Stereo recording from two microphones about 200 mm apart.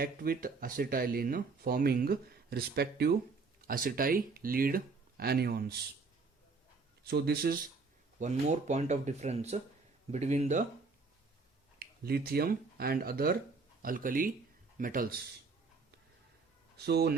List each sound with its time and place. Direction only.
0.0 s speech: 45° right (ahead or behind)
7.1 s speech: 50° right (ahead or behind)
8.2 s speech: 35° right (ahead or behind)
11.8 s speech: 50° right (ahead or behind)
16.7 s speech: 55° right (ahead or behind)